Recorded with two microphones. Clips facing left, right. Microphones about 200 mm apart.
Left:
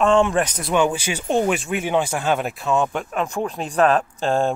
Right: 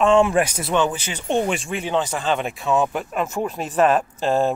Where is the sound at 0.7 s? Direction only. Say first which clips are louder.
Left 2 dB; 10° left (ahead or behind).